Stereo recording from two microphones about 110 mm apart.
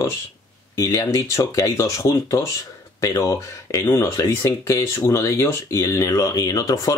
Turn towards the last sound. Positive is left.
turn(degrees=30)  # may be behind; listen again after turning